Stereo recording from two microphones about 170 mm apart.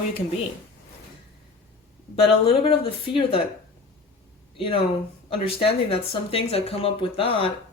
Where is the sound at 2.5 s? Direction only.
35° left (ahead or behind).